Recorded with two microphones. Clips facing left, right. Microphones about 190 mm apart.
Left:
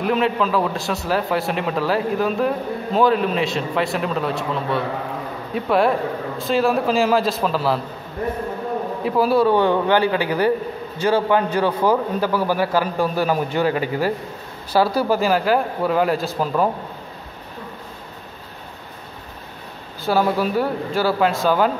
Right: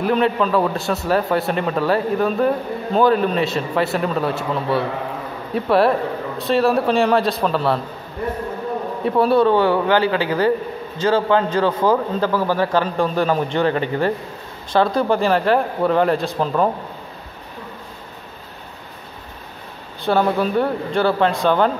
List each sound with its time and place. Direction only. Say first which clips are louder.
0.0 s a man's voice: right 2 dB; centre (ahead or behind)
9.0 s a man's voice: right 2 dB; centre (ahead or behind)
9.5 s a man's voice: right 1 dB; 15° left (ahead or behind)
20.1 s a man's voice: right 1 dB; 5° left (ahead or behind)